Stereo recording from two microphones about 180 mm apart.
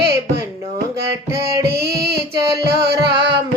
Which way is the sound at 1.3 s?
20° right (ahead or behind).